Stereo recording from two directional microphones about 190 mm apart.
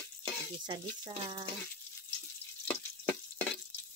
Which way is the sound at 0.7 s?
25° right (ahead or behind).